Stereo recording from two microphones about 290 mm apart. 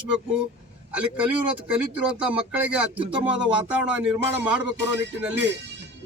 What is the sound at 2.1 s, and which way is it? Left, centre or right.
Speech, centre.